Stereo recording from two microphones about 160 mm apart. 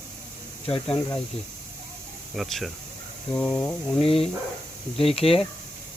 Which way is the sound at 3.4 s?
10° left (ahead or behind).